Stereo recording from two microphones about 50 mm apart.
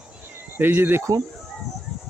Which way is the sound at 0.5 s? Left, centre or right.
Right.